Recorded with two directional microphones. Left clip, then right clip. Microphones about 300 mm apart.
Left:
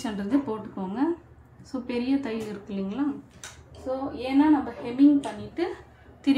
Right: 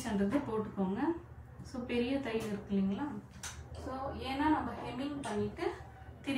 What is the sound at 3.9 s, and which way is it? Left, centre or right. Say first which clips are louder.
Speech: left 12 dB; left.